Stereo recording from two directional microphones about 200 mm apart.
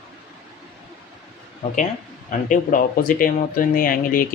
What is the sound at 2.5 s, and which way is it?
Speech, 40° left (ahead or behind).